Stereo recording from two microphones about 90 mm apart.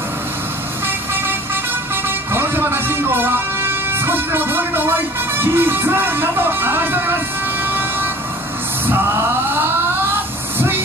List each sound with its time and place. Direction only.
2.3 s vehicle: 25° right (ahead or behind)
5.4 s speech: 25° right (ahead or behind)